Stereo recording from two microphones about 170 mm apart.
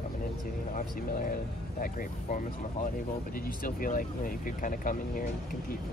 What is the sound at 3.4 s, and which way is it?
Speech, 55° left (ahead or behind).